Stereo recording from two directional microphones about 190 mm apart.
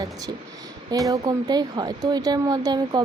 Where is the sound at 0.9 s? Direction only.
15° right (ahead or behind).